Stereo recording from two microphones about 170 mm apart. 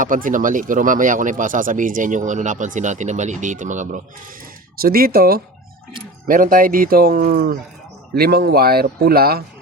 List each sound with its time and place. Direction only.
0.0 s speech: 50° right (ahead or behind)
4.8 s speech: 60° right (ahead or behind)